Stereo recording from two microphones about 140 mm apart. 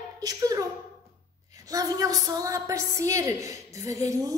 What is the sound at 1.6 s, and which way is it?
A woman's voice, 25° right (ahead or behind).